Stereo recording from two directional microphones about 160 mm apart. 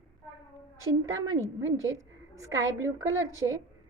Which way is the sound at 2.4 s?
20° right (ahead or behind).